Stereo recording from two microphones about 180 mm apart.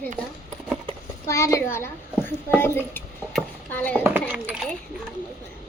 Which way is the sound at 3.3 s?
10° left (ahead or behind).